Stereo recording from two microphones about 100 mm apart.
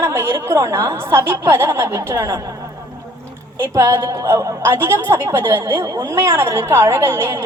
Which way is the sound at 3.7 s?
30° right (ahead or behind).